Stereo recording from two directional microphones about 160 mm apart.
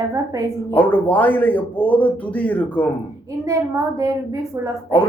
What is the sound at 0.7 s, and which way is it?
Speech, 10° left (ahead or behind).